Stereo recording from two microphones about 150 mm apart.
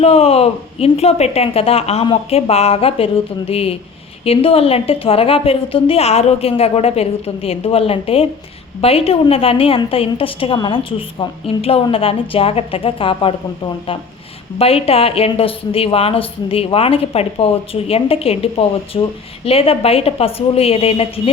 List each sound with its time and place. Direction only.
0.0 s a woman's voice: 40° left (ahead or behind)
14.6 s a woman's voice: 40° left (ahead or behind)